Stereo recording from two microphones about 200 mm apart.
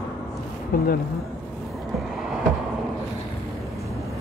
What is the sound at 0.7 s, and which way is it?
Speech, 45° left (ahead or behind).